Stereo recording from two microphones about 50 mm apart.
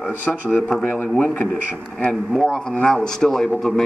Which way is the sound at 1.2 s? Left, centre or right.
Left.